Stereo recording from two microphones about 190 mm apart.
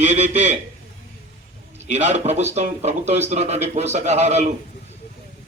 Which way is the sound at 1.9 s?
35° right (ahead or behind).